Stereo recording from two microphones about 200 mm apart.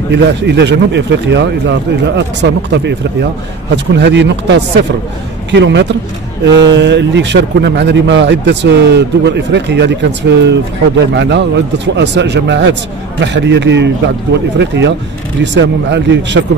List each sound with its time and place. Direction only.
0.1 s speech: 60° right (ahead or behind)